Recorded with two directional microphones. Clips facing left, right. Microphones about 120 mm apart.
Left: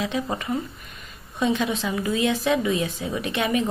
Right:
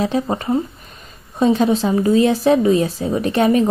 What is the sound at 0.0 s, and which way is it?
Speech, 35° right (ahead or behind).